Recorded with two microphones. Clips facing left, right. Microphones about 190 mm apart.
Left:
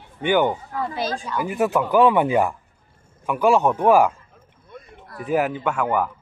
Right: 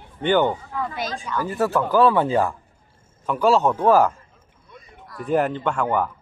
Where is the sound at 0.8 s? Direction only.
30° left (ahead or behind).